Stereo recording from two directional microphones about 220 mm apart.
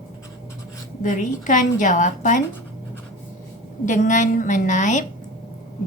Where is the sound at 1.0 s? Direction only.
35° left (ahead or behind).